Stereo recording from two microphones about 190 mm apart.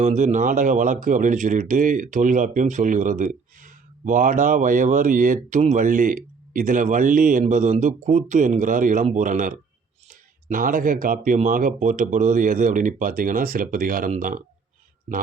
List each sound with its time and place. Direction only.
0.0 s speech: 40° right (ahead or behind)